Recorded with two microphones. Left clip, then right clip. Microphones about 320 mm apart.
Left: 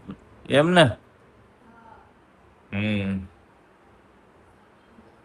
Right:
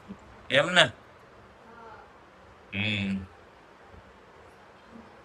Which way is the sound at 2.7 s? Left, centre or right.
Centre.